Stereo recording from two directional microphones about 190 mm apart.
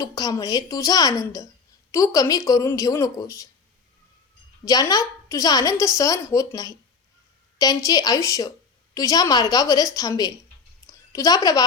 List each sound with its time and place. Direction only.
0.0 s a woman's voice: 20° left (ahead or behind)
4.6 s a woman's voice: 20° left (ahead or behind)
10.8 s a sound: 15° left (ahead or behind)